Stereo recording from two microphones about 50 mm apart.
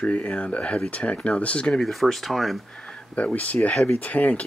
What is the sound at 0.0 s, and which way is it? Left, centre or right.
Speech, left.